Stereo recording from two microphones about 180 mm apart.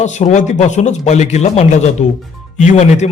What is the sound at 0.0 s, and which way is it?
A man's voice, 40° left (ahead or behind).